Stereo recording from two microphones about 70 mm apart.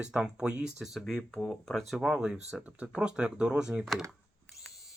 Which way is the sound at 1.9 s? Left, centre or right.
Centre.